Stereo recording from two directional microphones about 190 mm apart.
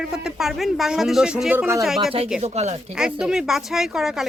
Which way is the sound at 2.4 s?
35° right (ahead or behind).